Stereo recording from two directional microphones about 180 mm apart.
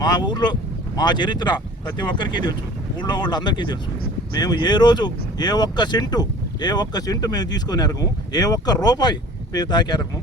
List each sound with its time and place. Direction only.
0.0 s speech: 25° left (ahead or behind)